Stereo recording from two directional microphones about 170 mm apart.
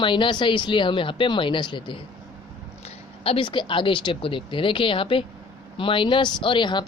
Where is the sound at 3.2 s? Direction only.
30° left (ahead or behind).